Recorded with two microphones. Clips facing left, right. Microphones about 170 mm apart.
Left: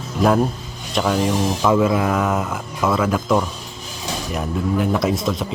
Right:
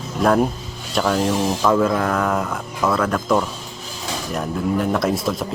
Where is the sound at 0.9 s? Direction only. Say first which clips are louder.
Even; centre (ahead or behind).